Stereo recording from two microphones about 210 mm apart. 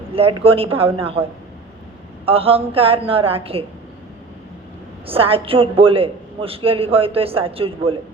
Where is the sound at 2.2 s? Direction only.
25° right (ahead or behind).